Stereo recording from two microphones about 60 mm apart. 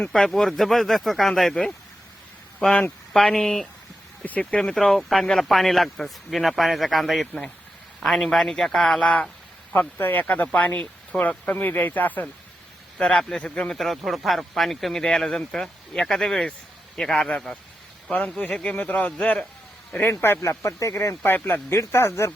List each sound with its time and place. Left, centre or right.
0.1 s speech: centre
4.2 s speech: left
4.7 s speech: centre
9.0 s speech: centre
9.7 s speech: left
13.0 s speech: centre
13.7 s speech: centre
18.5 s speech: centre
18.8 s speech: left
19.9 s a man's voice: left
20.7 s speech: left
20.9 s speech: left
21.2 s a man's voice: left
21.8 s speech: left